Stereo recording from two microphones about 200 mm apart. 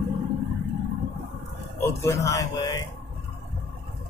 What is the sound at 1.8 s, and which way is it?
A man's voice, 15° left (ahead or behind).